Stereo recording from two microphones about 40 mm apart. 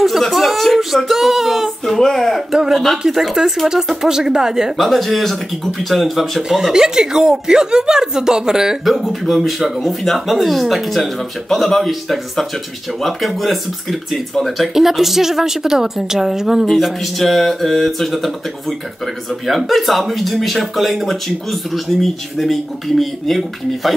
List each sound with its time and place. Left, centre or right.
0.2 s speech: centre
2.5 s speech: centre
4.7 s speech: centre
6.5 s speech: centre
8.8 s speech: centre